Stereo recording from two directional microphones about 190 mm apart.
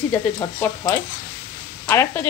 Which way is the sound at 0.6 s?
15° left (ahead or behind).